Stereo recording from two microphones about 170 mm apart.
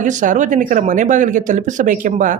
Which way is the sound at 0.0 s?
50° right (ahead or behind).